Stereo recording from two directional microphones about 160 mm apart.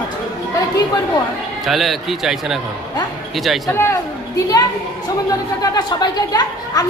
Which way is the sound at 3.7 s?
15° left (ahead or behind).